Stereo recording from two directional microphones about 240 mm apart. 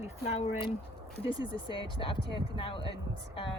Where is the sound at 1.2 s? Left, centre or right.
Left.